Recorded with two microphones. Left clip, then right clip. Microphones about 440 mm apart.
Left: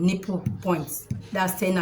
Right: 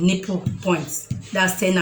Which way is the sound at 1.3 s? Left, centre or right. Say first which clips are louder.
Right 5 dB; left.